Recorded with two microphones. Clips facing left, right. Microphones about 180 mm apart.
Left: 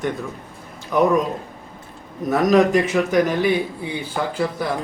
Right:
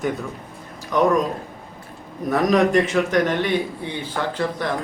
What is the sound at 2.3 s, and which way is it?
A man's voice, centre (ahead or behind).